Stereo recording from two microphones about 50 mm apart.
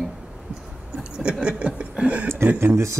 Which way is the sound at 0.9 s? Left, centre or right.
Centre.